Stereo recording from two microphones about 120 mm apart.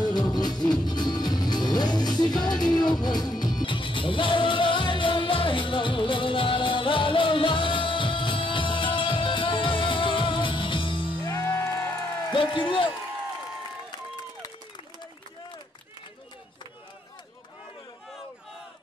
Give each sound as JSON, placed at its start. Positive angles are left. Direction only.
{"t": 0.0, "sound": "music", "side_deg": 35}
{"t": 11.3, "sound": "music", "side_deg": 20}
{"t": 12.3, "sound": "a sound", "side_deg": 40}